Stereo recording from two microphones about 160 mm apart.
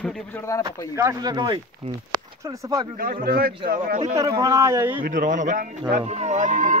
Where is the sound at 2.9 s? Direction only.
65° right (ahead or behind).